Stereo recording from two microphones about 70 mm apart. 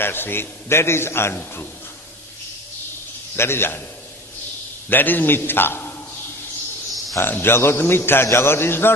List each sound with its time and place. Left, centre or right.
0.0 s a man's voice: left
3.3 s a man's voice: left
4.9 s a man's voice: left
7.2 s a man's voice: left